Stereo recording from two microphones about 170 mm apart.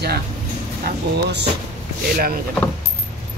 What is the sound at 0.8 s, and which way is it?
Speech, 85° right.